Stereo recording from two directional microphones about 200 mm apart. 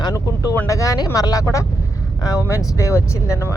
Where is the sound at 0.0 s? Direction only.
15° left (ahead or behind).